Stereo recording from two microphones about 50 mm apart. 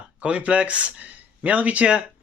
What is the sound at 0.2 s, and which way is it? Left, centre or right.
Speech, right.